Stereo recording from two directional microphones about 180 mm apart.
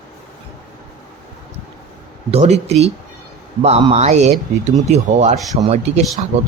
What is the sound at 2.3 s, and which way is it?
Speech, 35° right (ahead or behind).